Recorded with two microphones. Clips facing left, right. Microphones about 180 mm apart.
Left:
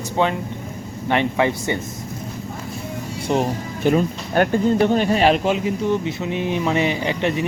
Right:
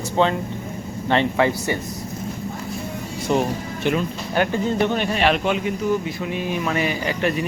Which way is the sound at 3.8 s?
40° left (ahead or behind).